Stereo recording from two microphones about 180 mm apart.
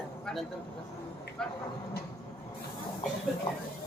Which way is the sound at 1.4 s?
5° left (ahead or behind).